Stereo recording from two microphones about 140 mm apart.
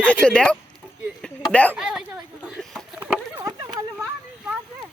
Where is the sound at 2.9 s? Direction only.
15° right (ahead or behind).